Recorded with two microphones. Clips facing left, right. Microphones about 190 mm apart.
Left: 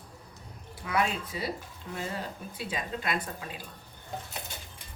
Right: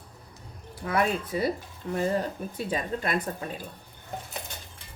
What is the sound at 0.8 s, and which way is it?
Speech, 50° right (ahead or behind).